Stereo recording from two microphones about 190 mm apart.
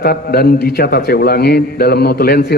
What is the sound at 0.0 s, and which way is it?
A man's voice, 55° left (ahead or behind).